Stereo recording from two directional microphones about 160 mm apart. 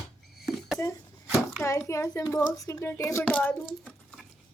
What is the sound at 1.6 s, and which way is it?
Speech, 15° left (ahead or behind).